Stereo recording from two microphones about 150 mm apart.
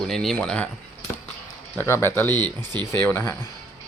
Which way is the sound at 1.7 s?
15° left (ahead or behind).